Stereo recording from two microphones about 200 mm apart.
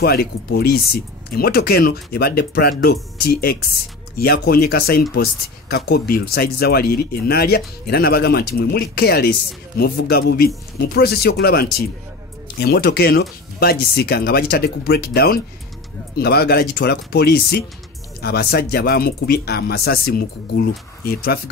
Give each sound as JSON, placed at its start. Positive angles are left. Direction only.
{"t": 0.0, "sound": "speech", "side_deg": 50}